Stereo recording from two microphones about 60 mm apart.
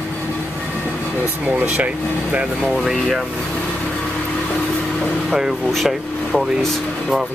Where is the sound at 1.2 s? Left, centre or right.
Right.